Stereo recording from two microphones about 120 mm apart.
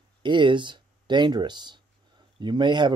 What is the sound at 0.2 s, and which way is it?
Speech, 40° right (ahead or behind).